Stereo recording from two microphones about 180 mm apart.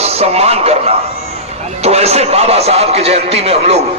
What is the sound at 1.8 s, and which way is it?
A man's voice, 35° right (ahead or behind).